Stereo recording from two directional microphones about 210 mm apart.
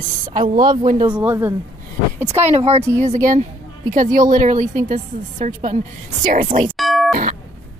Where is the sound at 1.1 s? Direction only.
10° right (ahead or behind).